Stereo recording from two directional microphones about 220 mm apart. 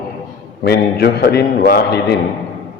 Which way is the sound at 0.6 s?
45° left (ahead or behind).